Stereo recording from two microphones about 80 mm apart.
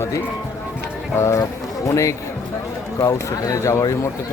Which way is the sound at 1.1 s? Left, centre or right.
Left.